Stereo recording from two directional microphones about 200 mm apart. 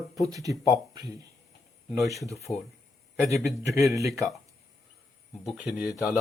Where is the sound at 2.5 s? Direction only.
15° left (ahead or behind).